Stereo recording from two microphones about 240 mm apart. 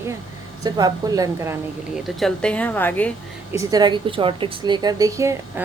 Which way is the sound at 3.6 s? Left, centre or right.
Centre.